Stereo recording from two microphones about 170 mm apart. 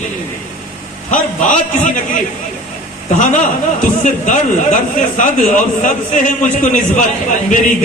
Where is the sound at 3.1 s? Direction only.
50° left (ahead or behind).